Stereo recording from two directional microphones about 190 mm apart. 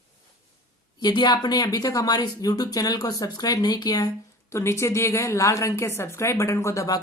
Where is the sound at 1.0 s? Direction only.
25° left (ahead or behind).